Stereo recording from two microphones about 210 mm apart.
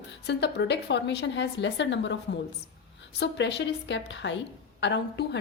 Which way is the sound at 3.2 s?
55° left (ahead or behind).